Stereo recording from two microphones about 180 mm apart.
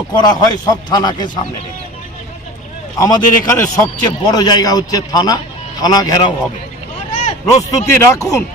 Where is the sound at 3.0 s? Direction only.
20° left (ahead or behind).